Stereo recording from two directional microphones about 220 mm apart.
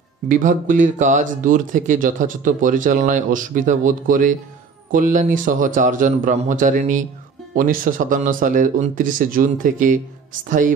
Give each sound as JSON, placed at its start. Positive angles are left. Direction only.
{"t": 0.3, "sound": "speech", "side_deg": -35}